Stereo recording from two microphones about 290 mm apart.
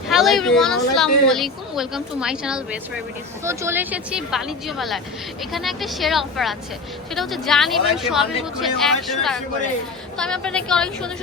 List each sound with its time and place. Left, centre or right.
0.1 s a woman's voice: centre